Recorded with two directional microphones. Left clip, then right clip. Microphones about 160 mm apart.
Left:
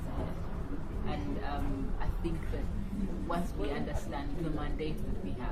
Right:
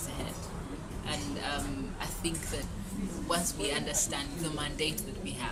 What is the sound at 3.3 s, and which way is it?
A woman's voice, 25° right (ahead or behind).